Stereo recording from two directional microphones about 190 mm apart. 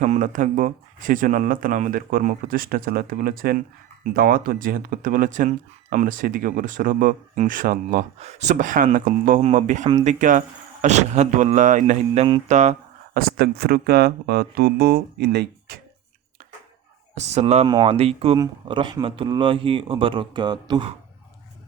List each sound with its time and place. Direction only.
0.0 s speech: 40° right (ahead or behind)
8.2 s speech: 35° right (ahead or behind)
13.1 s speech: 50° right (ahead or behind)
17.2 s speech: 35° right (ahead or behind)